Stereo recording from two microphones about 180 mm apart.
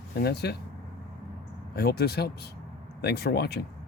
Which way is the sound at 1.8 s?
60° left (ahead or behind).